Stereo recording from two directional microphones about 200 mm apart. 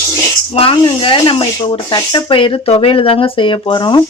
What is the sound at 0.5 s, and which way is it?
Speech, 25° left (ahead or behind).